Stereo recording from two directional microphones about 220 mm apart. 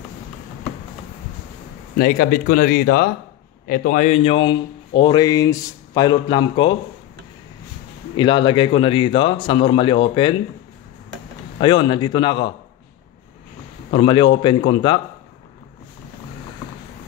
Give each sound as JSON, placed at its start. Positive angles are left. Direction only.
{"t": 2.0, "sound": "speech", "side_deg": 40}
{"t": 8.2, "sound": "speech", "side_deg": 20}
{"t": 11.5, "sound": "speech", "side_deg": 20}
{"t": 13.9, "sound": "speech", "side_deg": 20}